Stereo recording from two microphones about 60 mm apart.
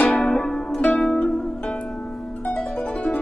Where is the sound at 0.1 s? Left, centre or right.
Centre.